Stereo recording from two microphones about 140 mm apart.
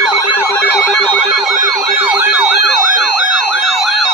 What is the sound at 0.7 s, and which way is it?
Alarm, 10° left (ahead or behind).